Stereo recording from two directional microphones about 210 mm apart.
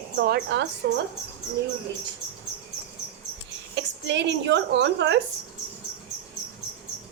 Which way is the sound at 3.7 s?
55° right (ahead or behind).